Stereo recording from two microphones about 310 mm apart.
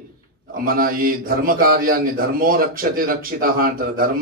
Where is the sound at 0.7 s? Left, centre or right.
Right.